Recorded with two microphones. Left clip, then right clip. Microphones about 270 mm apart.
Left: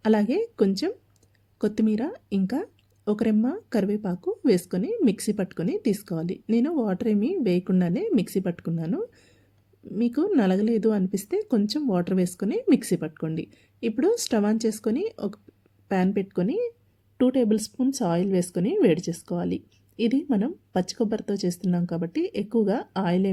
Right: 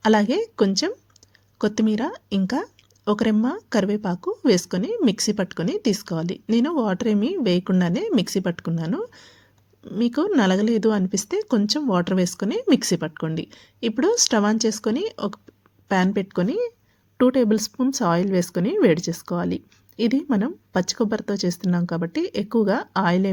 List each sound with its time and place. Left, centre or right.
0.0 s speech: centre